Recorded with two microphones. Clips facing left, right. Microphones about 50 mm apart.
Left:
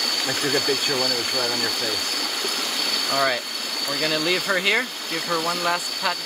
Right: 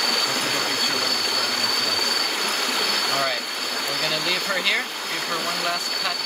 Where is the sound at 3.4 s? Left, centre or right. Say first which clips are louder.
Right 2 dB; right.